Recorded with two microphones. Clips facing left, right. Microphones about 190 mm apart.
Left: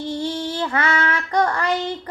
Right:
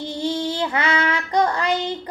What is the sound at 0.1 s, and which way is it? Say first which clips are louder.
Child singing: right 3 dB; 15° right (ahead or behind).